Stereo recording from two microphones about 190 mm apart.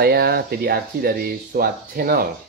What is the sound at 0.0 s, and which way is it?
Speech, 55° right (ahead or behind).